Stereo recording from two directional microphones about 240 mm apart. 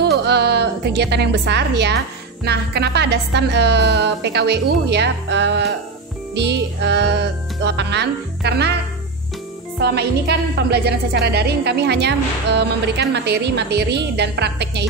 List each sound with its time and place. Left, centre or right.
0.0 s music: right
2.4 s a woman's voice: right
9.8 s a woman's voice: right